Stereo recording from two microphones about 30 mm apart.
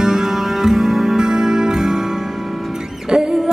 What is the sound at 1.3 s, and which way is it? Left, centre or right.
Music, right.